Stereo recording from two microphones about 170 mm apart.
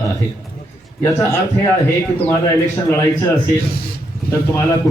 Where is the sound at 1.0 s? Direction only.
15° left (ahead or behind).